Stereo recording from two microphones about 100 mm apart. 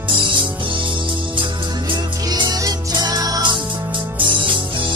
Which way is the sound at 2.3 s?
40° right (ahead or behind).